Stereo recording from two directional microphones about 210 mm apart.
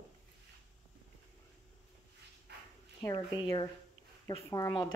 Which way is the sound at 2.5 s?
50° right (ahead or behind).